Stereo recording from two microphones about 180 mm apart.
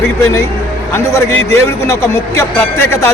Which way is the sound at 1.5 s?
15° left (ahead or behind).